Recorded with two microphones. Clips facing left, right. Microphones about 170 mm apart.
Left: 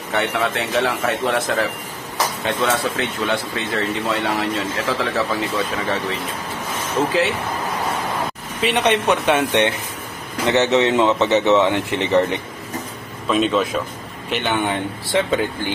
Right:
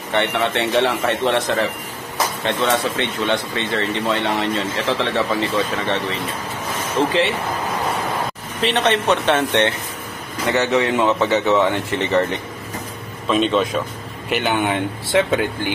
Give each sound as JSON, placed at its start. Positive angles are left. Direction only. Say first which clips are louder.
{"t": 0.1, "sound": "speech", "louder": "right 1 dB", "side_deg": 5}
{"t": 8.5, "sound": "a man's voice", "louder": "even", "side_deg": 10}
{"t": 13.3, "sound": "speech", "louder": "right 1 dB", "side_deg": 5}